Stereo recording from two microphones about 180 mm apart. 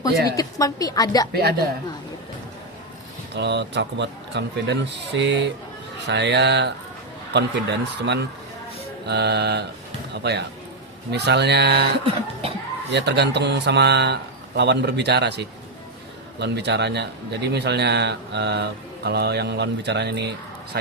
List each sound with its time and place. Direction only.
0.0 s speech: 20° left (ahead or behind)
1.3 s a woman's voice: 65° right (ahead or behind)
3.3 s speech: 70° right (ahead or behind)
12.0 s cough: 30° right (ahead or behind)
12.9 s speech: 70° right (ahead or behind)